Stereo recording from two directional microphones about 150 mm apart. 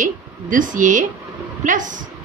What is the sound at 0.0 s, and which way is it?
Speech, 60° right (ahead or behind).